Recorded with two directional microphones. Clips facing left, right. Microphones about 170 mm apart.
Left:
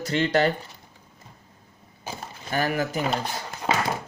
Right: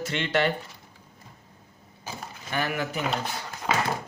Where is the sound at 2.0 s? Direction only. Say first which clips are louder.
Left 2 dB; 35° left (ahead or behind).